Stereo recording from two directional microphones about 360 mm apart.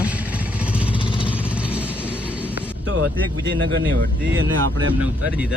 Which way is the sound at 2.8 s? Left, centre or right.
Right.